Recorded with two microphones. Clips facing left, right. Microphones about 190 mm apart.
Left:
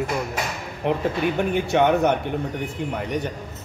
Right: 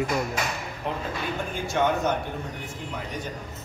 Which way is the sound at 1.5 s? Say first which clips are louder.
Left 4 dB; 65° left (ahead or behind).